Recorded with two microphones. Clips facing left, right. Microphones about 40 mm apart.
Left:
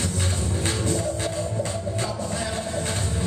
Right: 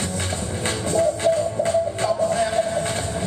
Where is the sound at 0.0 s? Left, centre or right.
Centre.